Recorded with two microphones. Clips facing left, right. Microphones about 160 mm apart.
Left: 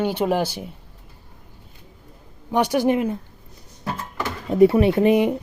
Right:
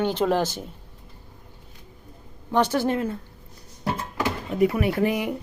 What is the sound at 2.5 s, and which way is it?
Speech, 15° left (ahead or behind).